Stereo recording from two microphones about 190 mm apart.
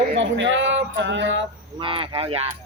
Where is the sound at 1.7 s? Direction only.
25° right (ahead or behind).